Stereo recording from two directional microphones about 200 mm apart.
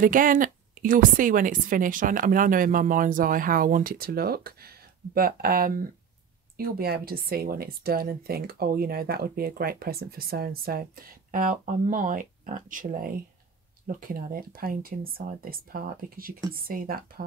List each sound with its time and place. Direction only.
0.0 s speech: 40° right (ahead or behind)